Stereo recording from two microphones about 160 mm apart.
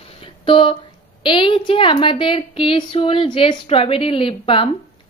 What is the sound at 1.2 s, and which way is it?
A woman's voice, 30° left (ahead or behind).